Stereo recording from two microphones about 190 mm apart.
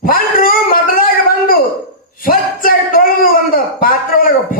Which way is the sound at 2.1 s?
50° left (ahead or behind).